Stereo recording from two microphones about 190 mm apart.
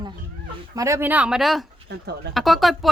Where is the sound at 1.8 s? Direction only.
60° right (ahead or behind).